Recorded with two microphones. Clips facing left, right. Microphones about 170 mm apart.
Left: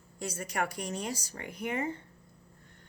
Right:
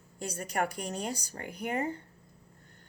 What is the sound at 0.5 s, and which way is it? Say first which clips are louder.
A woman's voice: right 2 dB; 45° right (ahead or behind).